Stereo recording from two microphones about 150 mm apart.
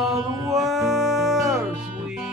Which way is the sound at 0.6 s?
Centre (ahead or behind).